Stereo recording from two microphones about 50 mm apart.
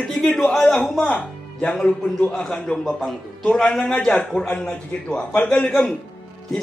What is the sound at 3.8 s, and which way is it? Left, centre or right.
A man's voice, centre.